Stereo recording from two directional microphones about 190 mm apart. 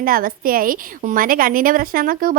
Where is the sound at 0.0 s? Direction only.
50° right (ahead or behind).